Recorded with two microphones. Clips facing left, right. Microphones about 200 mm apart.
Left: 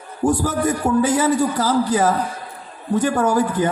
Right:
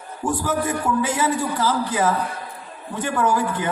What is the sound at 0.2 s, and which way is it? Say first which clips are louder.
A man's voice: left 5 dB; 40° left (ahead or behind).